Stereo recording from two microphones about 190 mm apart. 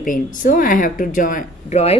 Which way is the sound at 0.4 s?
45° left (ahead or behind).